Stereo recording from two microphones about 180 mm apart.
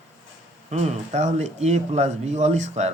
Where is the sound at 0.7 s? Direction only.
40° right (ahead or behind).